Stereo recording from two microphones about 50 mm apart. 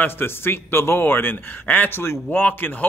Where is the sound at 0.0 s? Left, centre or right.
Left.